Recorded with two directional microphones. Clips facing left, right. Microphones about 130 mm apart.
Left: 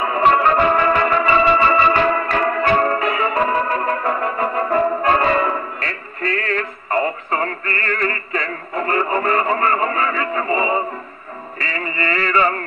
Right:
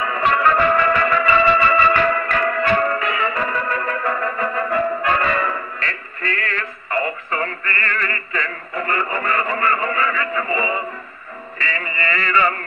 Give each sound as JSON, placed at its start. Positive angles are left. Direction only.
{"t": 0.0, "sound": "music", "side_deg": 30}